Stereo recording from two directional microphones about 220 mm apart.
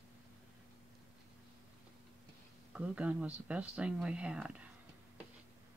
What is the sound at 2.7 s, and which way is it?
Speech, 5° right (ahead or behind).